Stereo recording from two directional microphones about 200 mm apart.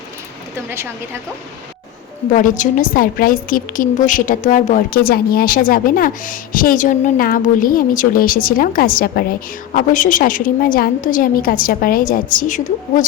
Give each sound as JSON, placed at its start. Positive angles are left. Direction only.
{"t": 2.3, "sound": "a woman's voice", "side_deg": 40}